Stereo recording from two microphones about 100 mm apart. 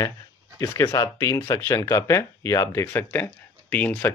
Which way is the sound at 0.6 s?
30° left (ahead or behind).